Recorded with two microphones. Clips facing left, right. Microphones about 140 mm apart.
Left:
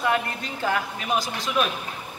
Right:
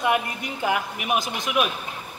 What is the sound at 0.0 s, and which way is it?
A man's voice, 15° right (ahead or behind).